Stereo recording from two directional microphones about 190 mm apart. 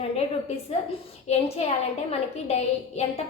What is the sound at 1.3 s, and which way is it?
A woman's voice, 35° left (ahead or behind).